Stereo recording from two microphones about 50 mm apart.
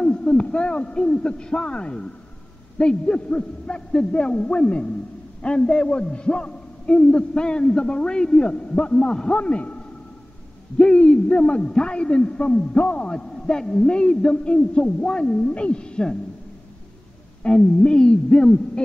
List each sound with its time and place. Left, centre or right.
0.0 s a man's voice: centre
9.3 s a man's voice: left
10.8 s a man's voice: centre
17.5 s a sound: centre